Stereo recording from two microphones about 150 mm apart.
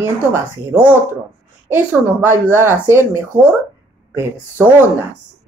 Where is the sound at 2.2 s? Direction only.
15° right (ahead or behind).